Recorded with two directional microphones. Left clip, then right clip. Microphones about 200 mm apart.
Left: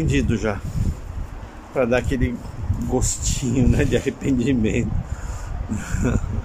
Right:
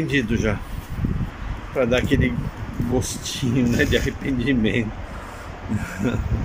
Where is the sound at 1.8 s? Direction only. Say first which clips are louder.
Even; 5° left (ahead or behind).